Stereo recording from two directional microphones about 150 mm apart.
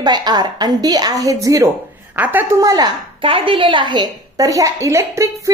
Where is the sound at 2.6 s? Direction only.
25° right (ahead or behind).